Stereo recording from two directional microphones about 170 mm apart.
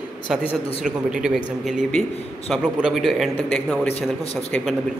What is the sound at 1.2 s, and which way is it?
A man's voice, centre (ahead or behind).